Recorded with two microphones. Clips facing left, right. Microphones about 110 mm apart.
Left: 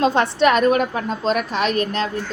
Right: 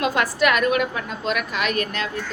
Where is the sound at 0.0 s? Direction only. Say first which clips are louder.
Left 4 dB; 30° left (ahead or behind).